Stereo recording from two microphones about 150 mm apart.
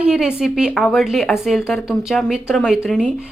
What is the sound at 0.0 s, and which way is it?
A woman's voice, 5° right (ahead or behind).